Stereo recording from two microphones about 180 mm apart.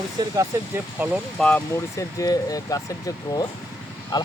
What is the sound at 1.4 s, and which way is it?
Speech, 10° left (ahead or behind).